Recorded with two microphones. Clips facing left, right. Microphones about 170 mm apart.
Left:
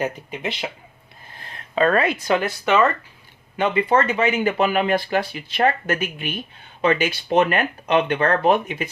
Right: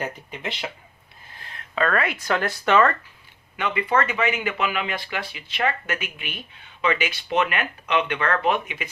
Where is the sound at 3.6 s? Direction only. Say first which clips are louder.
Left 4 dB; 30° left (ahead or behind).